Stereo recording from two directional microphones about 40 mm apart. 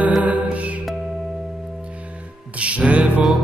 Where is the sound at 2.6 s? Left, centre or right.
Right.